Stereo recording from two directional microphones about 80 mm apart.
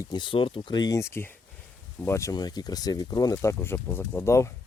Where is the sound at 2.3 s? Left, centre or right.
Left.